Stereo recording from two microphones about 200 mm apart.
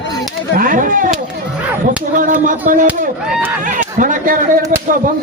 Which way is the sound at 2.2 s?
40° right (ahead or behind).